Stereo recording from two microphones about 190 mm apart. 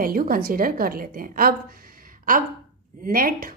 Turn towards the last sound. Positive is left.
turn(degrees=-50)  # may be behind; listen again after turning